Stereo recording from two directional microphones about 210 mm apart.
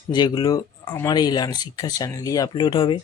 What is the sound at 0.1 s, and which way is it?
Speech, 20° left (ahead or behind).